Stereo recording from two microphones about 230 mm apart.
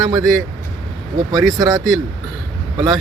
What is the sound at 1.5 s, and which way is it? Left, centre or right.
Speech, centre.